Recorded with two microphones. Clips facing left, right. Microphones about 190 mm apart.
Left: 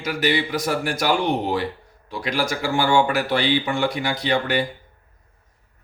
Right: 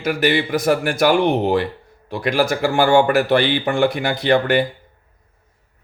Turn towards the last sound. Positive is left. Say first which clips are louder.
# right 6 dB
turn(degrees=-55)  # may be behind; listen again after turning